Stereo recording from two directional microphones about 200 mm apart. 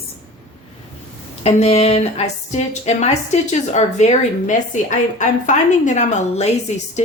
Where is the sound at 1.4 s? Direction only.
35° left (ahead or behind).